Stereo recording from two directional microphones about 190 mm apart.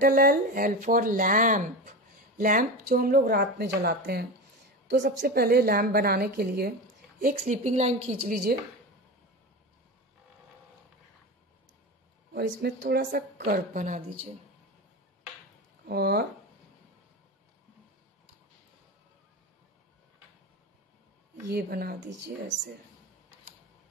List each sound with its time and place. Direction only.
0.0 s speech: 50° right (ahead or behind)
7.3 s a woman's voice: 40° right (ahead or behind)
12.4 s speech: 65° right (ahead or behind)
13.5 s speech: 45° right (ahead or behind)
15.9 s speech: 55° right (ahead or behind)
21.5 s speech: 55° right (ahead or behind)